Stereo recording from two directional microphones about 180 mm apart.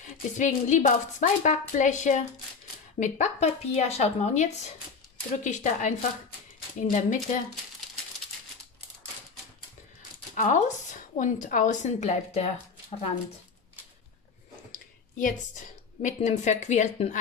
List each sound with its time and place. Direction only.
0.0 s a woman's voice: 45° left (ahead or behind)
10.3 s a woman's voice: 45° left (ahead or behind)
16.0 s speech: 40° left (ahead or behind)